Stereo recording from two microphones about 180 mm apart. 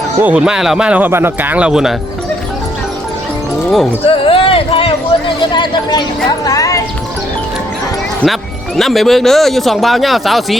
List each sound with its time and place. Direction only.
0.2 s speech: 5° right (ahead or behind)
4.0 s speech: 30° left (ahead or behind)
8.2 s speech: centre (ahead or behind)